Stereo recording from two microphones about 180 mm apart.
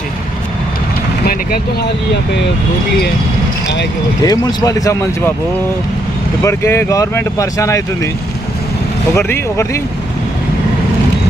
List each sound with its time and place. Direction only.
1.2 s vehicle: 55° left (ahead or behind)
4.2 s speech: 20° left (ahead or behind)
6.4 s speech: 15° left (ahead or behind)
9.1 s speech: 15° left (ahead or behind)